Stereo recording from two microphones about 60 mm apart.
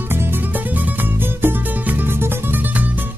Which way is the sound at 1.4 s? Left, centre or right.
Right.